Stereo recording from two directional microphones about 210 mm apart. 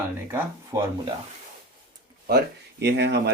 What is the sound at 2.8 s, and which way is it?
Speech, 50° right (ahead or behind).